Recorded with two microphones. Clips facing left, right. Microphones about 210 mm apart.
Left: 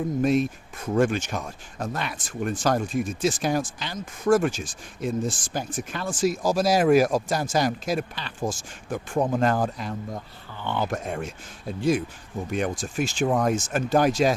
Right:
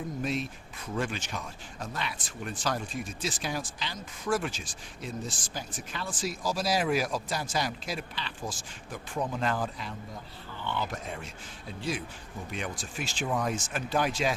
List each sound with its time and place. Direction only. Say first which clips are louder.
0.2 s speech: left 11 dB; 50° left (ahead or behind)